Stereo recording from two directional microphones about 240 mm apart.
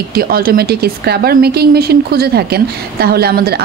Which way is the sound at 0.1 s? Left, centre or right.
Right.